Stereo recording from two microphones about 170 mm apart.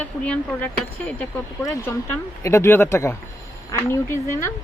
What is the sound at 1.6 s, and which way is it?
Speech, 20° left (ahead or behind).